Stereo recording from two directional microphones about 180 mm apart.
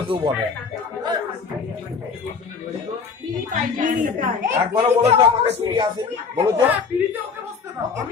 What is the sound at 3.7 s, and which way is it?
Speech, 50° right (ahead or behind).